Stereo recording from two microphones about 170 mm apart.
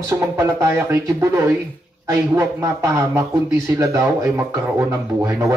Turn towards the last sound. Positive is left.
turn(degrees=-15)  # may be behind; listen again after turning